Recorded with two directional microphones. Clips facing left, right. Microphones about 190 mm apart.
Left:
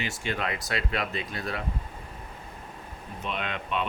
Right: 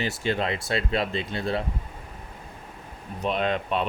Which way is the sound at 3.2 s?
35° right (ahead or behind).